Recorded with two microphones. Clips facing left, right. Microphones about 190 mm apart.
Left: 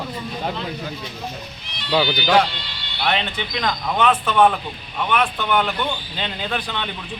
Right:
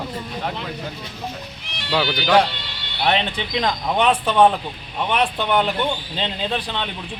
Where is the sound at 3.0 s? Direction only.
30° right (ahead or behind).